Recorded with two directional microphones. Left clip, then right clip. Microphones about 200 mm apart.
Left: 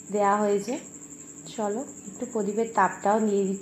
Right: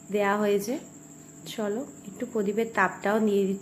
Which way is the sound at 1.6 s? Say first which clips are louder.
Left 2 dB; 25° right (ahead or behind).